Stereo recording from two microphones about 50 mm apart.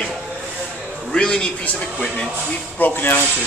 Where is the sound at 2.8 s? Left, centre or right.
Left.